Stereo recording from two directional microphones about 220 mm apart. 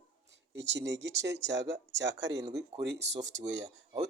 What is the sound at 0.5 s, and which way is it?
Speech, 50° right (ahead or behind).